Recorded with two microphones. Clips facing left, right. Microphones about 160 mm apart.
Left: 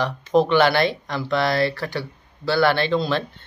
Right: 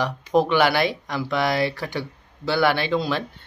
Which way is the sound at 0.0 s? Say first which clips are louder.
Left 2 dB; 10° right (ahead or behind).